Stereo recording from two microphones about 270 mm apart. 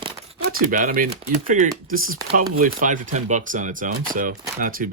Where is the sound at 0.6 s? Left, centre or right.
Right.